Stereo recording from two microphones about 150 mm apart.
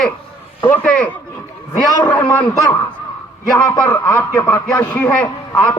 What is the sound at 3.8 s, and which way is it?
Speech, 10° left (ahead or behind).